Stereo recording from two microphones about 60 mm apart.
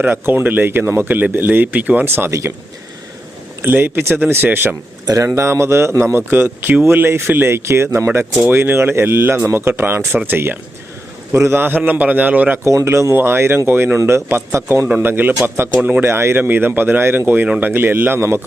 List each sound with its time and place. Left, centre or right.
0.0 s speech: right
2.0 s speech: right
3.7 s speech: right
5.0 s speech: right
6.1 s speech: right
8.2 s a man's voice: right
12.6 s speech: right
14.9 s speech: right
15.8 s a man's voice: right
16.0 s speech: right
18.2 s speech: right